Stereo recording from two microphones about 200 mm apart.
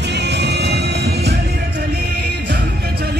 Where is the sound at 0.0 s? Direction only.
60° right (ahead or behind).